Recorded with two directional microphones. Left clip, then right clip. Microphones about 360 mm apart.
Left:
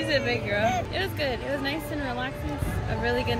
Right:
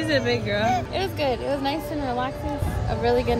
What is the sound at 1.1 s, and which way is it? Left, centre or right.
Speech, centre.